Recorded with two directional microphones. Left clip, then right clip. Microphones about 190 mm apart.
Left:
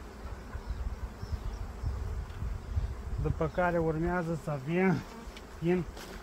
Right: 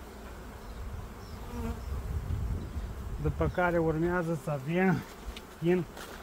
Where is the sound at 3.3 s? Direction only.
35° right (ahead or behind).